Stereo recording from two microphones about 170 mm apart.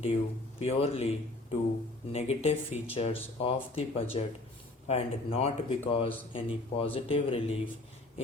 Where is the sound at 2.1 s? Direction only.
35° left (ahead or behind).